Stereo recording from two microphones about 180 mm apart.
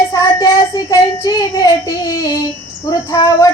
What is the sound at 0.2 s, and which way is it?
Child singing, 20° left (ahead or behind).